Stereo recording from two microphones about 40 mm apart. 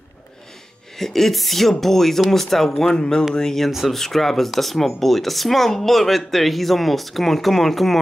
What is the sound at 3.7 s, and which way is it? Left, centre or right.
Speech, centre.